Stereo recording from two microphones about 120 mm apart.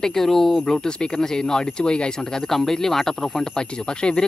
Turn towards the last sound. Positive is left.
turn(degrees=5)  # may be behind; listen again after turning